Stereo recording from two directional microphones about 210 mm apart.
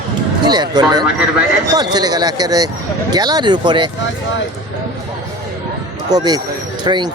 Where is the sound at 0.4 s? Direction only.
20° right (ahead or behind).